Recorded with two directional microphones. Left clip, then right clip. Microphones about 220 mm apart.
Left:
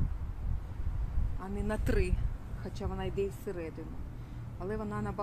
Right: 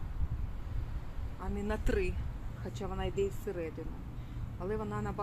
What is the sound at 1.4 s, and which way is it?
Speech, 20° left (ahead or behind).